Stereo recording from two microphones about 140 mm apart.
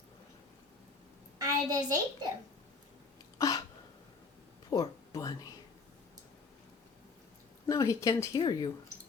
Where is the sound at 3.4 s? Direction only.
25° left (ahead or behind).